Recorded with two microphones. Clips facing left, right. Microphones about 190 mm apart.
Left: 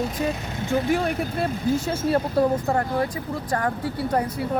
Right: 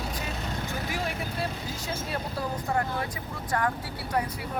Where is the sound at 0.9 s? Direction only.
55° left (ahead or behind).